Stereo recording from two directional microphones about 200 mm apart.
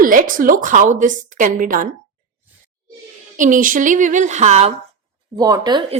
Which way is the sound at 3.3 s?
40° right (ahead or behind).